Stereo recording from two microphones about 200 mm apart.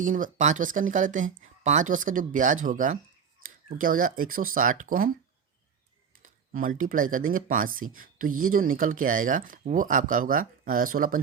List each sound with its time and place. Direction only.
0.0 s speech: 40° right (ahead or behind)
6.2 s speech: 45° right (ahead or behind)